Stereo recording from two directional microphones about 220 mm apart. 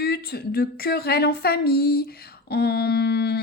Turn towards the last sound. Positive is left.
turn(degrees=45)  # may be behind; listen again after turning